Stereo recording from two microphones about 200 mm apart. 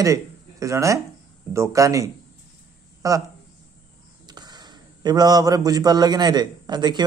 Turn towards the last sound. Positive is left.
turn(degrees=-20)  # may be behind; listen again after turning